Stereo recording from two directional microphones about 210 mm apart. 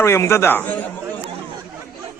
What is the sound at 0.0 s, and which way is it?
Speech, 10° left (ahead or behind).